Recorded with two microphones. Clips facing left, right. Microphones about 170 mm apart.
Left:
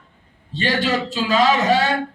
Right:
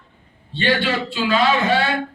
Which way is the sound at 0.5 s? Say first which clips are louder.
Even; 40° left (ahead or behind).